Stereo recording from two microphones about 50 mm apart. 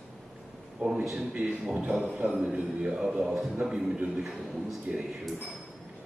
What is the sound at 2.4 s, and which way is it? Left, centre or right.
Speech, centre.